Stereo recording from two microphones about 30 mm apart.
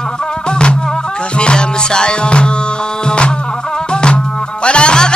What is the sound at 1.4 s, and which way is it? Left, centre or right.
Music, left.